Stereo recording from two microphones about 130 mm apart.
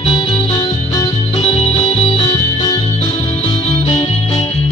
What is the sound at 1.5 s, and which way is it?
Music, 50° left (ahead or behind).